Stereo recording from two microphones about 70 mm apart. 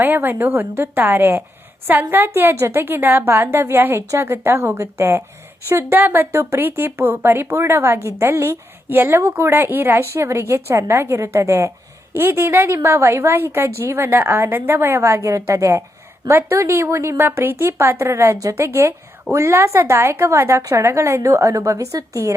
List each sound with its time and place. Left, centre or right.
0.0 s a woman's voice: right
6.0 s a woman's voice: right
6.3 s a woman's voice: right